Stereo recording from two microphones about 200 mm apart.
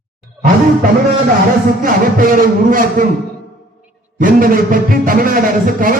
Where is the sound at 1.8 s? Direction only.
45° right (ahead or behind).